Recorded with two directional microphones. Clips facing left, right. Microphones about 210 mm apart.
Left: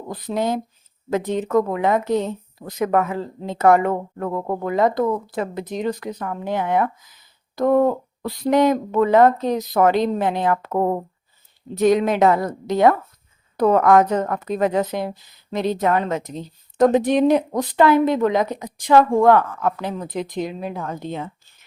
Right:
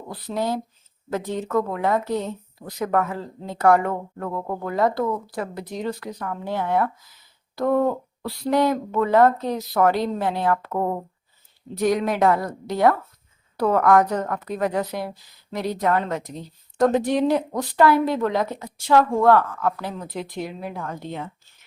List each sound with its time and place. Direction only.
0.1 s a woman's voice: 20° left (ahead or behind)